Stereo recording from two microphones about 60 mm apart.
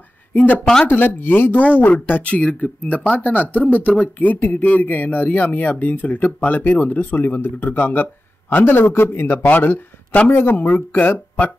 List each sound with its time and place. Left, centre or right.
0.3 s speech: left
9.5 s speech: left
10.3 s speech: left